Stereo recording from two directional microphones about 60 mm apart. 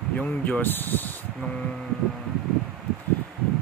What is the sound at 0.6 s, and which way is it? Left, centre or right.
Speech, left.